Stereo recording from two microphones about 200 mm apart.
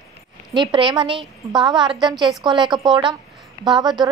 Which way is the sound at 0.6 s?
25° right (ahead or behind).